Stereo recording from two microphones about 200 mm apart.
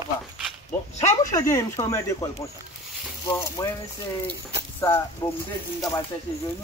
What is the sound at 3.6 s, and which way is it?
Speech, 20° left (ahead or behind).